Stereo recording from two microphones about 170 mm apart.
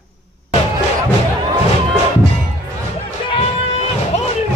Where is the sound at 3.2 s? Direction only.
35° left (ahead or behind).